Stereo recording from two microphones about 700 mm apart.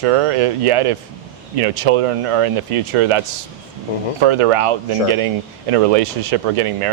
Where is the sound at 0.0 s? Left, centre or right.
Right.